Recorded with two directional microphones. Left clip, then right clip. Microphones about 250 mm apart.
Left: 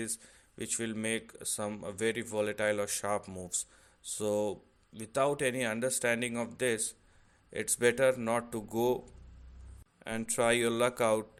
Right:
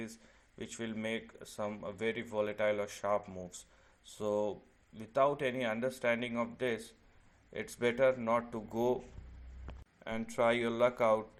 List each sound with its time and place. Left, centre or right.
0.6 s speech: left
10.0 s speech: left